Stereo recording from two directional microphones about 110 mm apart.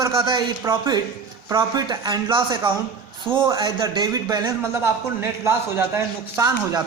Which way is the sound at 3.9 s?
35° right (ahead or behind).